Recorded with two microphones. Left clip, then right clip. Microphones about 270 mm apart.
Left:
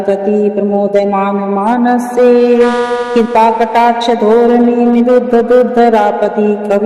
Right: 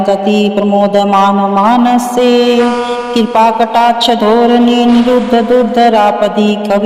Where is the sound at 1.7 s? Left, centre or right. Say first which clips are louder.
Right 3 dB; centre.